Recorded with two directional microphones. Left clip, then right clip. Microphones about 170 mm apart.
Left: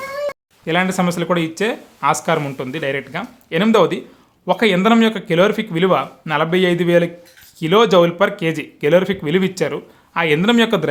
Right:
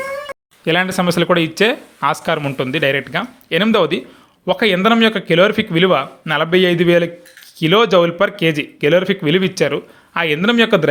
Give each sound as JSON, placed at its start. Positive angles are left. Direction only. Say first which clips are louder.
{"t": 0.6, "sound": "speech", "louder": "right 2 dB", "side_deg": -25}